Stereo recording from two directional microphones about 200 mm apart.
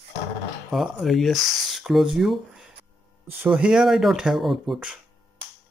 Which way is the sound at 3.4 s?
5° right (ahead or behind).